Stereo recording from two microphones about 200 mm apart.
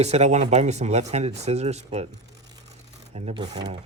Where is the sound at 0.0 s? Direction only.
35° right (ahead or behind).